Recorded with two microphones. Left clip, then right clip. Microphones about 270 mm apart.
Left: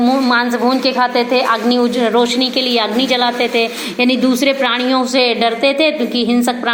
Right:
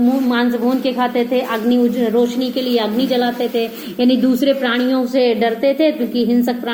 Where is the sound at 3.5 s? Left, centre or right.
Left.